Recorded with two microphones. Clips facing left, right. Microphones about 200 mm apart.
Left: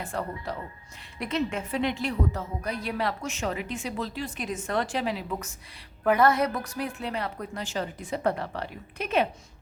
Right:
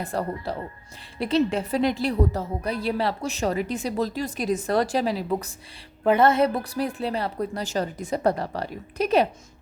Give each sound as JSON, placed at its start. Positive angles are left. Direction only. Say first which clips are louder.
{"t": 0.0, "sound": "a woman's voice", "louder": "right 5 dB", "side_deg": -35}
{"t": 6.0, "sound": "a woman's voice", "louder": "right 3 dB", "side_deg": -25}